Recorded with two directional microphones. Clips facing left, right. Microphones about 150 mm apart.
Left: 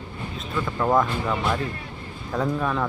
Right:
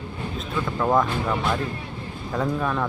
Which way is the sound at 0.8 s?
Centre (ahead or behind).